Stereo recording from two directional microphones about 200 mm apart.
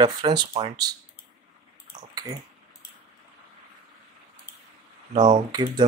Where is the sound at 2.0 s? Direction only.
20° right (ahead or behind).